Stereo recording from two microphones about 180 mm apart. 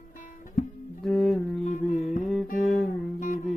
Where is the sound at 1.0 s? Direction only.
5° left (ahead or behind).